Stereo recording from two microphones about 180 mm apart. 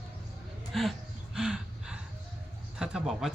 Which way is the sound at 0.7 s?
Centre (ahead or behind).